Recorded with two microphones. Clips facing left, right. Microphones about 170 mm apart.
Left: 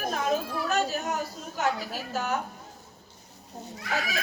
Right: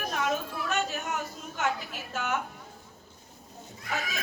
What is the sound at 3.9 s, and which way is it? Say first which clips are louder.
Speech: left 3 dB; 80° left.